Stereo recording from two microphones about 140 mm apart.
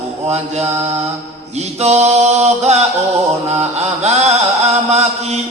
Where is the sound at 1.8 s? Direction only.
50° right (ahead or behind).